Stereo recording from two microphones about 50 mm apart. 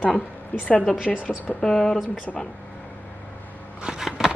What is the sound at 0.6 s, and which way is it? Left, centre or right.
Speech, left.